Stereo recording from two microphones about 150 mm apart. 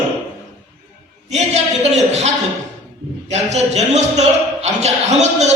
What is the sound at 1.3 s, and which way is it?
A man's voice, 50° right (ahead or behind).